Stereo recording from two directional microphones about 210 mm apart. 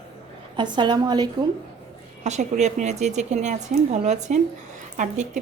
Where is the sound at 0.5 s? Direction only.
20° right (ahead or behind).